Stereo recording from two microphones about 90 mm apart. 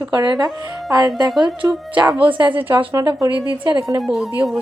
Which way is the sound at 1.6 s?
35° right (ahead or behind).